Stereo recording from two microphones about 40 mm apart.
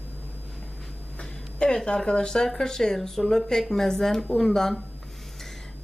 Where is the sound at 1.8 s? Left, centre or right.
Left.